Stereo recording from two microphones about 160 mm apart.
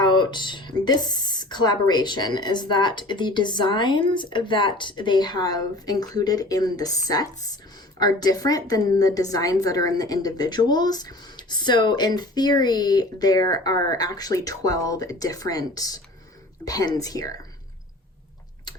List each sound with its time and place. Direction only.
0.0 s music: 30° left (ahead or behind)
0.9 s a woman's voice: 25° left (ahead or behind)